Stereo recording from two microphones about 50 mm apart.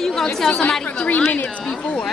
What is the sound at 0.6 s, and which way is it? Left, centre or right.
Speech, left.